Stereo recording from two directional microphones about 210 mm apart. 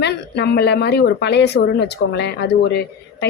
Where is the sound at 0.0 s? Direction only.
55° left (ahead or behind).